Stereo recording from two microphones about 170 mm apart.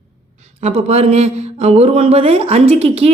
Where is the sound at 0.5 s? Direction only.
40° right (ahead or behind).